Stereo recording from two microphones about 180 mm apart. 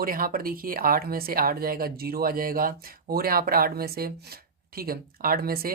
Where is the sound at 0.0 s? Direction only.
55° right (ahead or behind).